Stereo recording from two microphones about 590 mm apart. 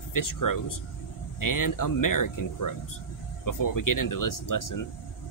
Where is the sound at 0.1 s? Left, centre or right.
Left.